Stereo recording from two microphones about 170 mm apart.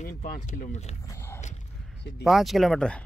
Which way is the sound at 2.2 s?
Centre (ahead or behind).